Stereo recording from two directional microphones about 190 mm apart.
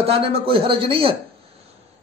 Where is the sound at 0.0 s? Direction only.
30° right (ahead or behind).